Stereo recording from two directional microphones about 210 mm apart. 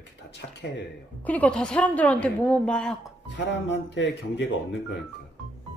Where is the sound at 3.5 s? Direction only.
55° left (ahead or behind).